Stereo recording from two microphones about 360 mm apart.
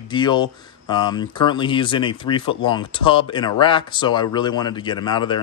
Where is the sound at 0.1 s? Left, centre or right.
Centre.